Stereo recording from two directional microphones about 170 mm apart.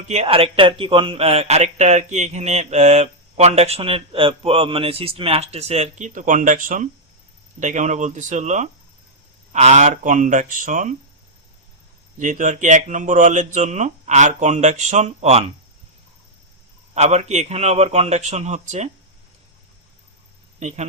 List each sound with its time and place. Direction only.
0.1 s speech: 35° right (ahead or behind)
12.2 s speech: 50° right (ahead or behind)
16.9 s speech: 40° right (ahead or behind)
20.6 s a man's voice: 40° right (ahead or behind)